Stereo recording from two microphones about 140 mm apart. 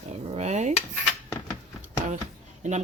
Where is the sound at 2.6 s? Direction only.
55° right (ahead or behind).